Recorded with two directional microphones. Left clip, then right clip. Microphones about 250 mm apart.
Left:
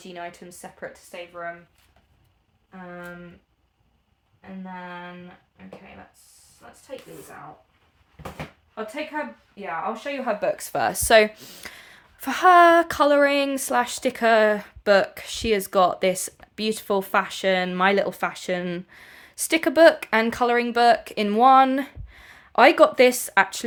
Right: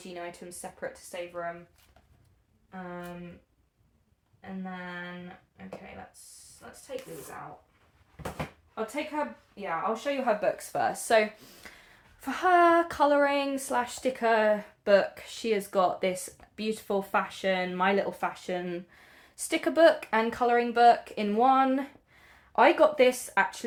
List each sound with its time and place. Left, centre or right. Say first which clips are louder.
0.1 s speech: left 4 dB; left
4.6 s speech: left 3 dB; centre
9.9 s speech: left 1 dB; left
10.6 s a woman's voice: left 5 dB; left